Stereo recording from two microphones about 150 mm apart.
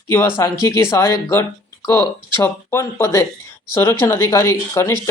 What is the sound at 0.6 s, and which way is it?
Speech, 20° left (ahead or behind).